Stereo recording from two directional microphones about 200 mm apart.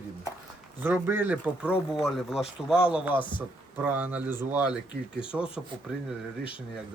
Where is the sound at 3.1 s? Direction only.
25° left (ahead or behind).